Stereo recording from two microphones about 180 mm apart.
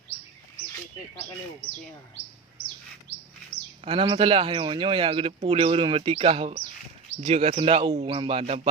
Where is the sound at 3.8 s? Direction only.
30° right (ahead or behind).